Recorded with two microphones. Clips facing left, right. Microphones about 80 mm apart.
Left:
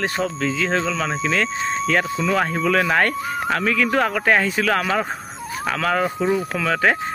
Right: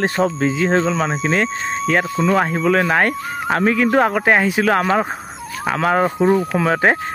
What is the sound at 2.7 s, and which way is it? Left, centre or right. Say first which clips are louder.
Speech: right 2 dB; centre.